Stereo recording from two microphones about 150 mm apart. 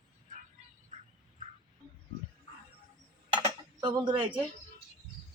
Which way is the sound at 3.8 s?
30° right (ahead or behind).